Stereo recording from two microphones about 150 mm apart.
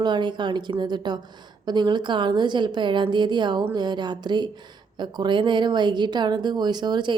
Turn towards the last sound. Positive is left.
turn(degrees=-30)  # may be behind; listen again after turning